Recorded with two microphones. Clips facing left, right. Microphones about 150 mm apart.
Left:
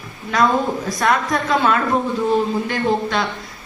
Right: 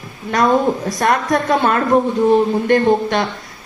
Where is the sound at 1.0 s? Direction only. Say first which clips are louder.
Right 3 dB; 50° right (ahead or behind).